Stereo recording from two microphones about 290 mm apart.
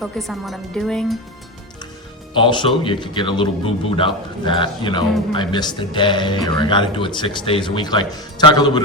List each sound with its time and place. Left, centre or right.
0.0 s a woman's voice: centre
2.3 s speech: centre